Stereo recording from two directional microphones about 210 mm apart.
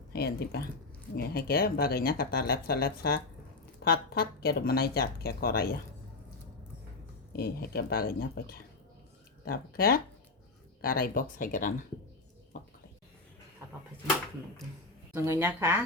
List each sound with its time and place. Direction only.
0.1 s speech: 50° left (ahead or behind)
7.3 s speech: 50° left (ahead or behind)
15.1 s speech: 10° right (ahead or behind)